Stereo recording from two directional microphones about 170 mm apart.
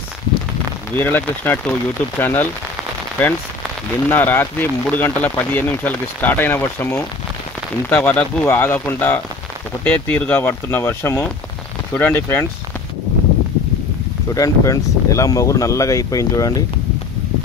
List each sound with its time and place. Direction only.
0.9 s speech: 10° left (ahead or behind)
4.1 s speech: 10° left (ahead or behind)
14.3 s speech: 20° left (ahead or behind)